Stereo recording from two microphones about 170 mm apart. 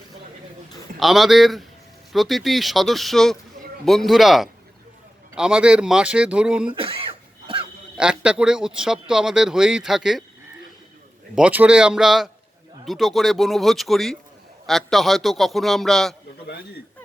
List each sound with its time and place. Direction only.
0.9 s speech: centre (ahead or behind)
6.7 s cough: 30° right (ahead or behind)
8.2 s speech: 5° right (ahead or behind)
11.3 s speech: 10° right (ahead or behind)
16.5 s speech: 65° left (ahead or behind)